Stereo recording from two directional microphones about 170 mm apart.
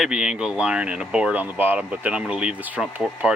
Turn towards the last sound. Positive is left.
turn(degrees=-10)  # may be behind; listen again after turning